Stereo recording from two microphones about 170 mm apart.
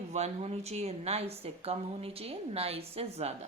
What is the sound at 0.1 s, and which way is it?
A woman's voice, 40° right (ahead or behind).